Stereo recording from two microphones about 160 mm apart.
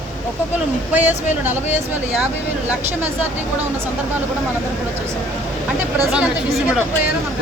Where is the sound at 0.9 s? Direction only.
10° right (ahead or behind).